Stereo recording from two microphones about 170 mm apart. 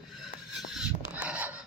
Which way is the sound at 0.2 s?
Centre (ahead or behind).